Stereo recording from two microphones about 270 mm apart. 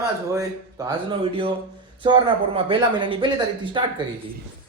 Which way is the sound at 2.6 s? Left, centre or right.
Centre.